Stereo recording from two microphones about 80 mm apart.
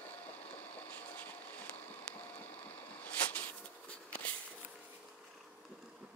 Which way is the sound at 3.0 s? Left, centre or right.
Centre.